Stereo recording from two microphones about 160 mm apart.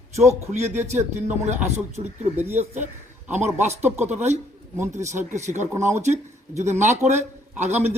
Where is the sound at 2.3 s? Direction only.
15° right (ahead or behind).